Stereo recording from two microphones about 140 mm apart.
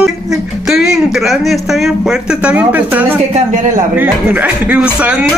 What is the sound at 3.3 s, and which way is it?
Speech, 60° right (ahead or behind).